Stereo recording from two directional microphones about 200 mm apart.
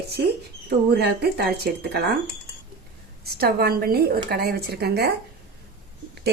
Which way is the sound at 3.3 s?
50° right (ahead or behind).